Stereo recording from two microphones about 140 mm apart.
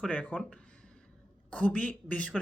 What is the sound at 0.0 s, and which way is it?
Speech, 10° left (ahead or behind).